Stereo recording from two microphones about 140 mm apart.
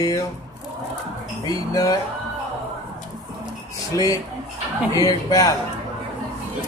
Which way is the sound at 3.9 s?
25° left (ahead or behind).